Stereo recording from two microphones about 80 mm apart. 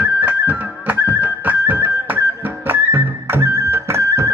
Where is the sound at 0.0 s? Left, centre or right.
Right.